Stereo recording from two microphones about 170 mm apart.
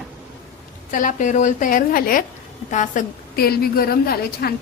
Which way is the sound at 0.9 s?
50° left (ahead or behind).